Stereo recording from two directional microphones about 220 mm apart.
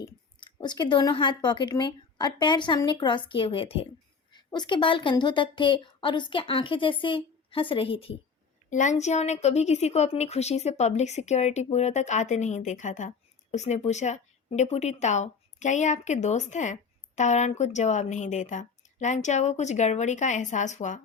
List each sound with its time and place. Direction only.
0.0 s a woman's voice: 20° left (ahead or behind)